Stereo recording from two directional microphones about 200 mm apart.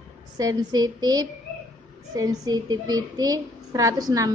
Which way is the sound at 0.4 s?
20° right (ahead or behind).